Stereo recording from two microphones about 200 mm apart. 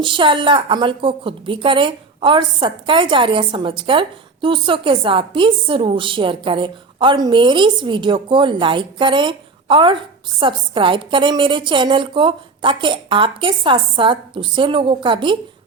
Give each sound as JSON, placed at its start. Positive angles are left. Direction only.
{"t": 0.0, "sound": "a woman's voice", "side_deg": -25}